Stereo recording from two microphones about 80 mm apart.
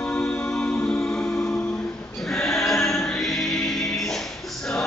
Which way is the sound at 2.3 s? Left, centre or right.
Centre.